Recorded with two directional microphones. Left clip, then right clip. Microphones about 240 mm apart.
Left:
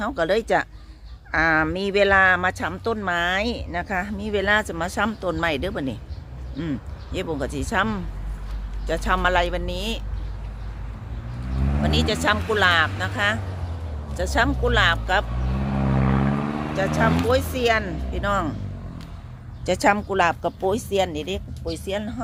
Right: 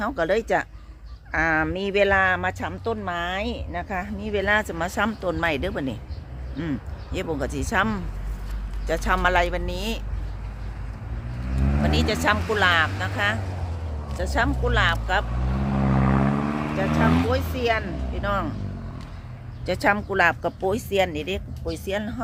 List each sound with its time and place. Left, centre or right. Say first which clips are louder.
0.0 s speech: left 1 dB; centre
11.8 s speech: left 1 dB; centre; by 15.2 s left
15.4 s vehicle: right 1 dB; right
17.5 s speech: left 3 dB; left
19.6 s speech: left 2 dB; centre
20.1 s speech: even; centre